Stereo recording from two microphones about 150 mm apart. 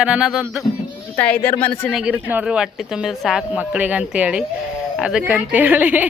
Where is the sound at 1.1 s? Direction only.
10° left (ahead or behind).